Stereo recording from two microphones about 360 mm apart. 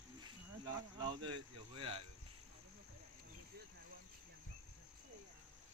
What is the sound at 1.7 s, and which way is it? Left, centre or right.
Speech, centre.